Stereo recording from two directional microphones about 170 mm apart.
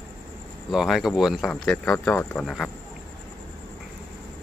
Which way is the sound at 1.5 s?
10° left (ahead or behind).